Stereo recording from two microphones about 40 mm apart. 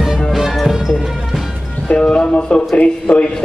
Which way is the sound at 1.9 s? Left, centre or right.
Left.